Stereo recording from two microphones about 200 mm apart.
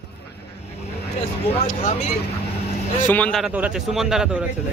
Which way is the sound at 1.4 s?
30° left (ahead or behind).